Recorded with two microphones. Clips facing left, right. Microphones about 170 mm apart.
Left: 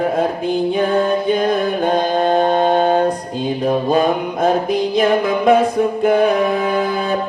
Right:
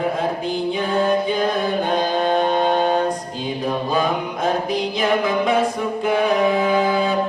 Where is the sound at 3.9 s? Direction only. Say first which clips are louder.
Left 5 dB; 55° left (ahead or behind).